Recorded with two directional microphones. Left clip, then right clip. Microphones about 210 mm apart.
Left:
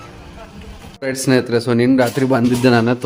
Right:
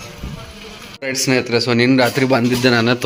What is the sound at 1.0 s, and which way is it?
Speech, 25° left (ahead or behind).